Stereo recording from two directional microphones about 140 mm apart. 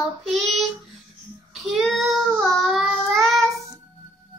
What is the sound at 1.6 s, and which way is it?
Child singing, centre (ahead or behind).